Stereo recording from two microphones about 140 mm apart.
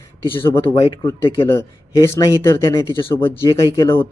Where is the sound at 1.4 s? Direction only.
20° left (ahead or behind).